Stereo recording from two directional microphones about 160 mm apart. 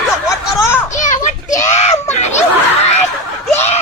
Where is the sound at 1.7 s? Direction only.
45° left (ahead or behind).